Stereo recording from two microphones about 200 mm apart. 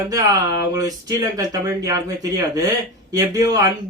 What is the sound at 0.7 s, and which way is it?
Speech, 20° right (ahead or behind).